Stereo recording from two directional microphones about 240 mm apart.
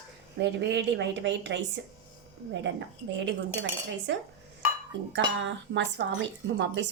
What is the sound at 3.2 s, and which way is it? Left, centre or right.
Speech, right.